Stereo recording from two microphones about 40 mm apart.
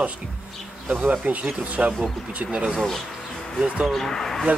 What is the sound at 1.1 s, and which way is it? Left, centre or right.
Speech, right.